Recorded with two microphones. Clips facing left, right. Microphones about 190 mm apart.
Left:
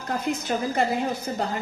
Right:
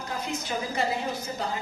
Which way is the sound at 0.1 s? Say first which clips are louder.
Left 6 dB; 55° left (ahead or behind).